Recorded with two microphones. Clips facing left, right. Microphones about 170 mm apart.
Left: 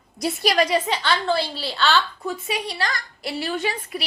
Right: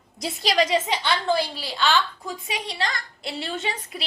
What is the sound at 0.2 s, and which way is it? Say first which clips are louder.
A woman's voice: left 2 dB; 20° right (ahead or behind).